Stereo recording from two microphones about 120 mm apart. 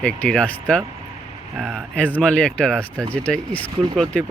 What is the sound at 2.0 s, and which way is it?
Speech, 10° left (ahead or behind).